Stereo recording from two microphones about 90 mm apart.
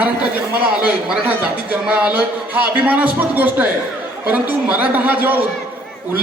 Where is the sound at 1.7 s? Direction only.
15° right (ahead or behind).